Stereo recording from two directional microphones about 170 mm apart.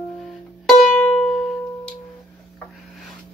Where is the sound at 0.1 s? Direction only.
Centre (ahead or behind).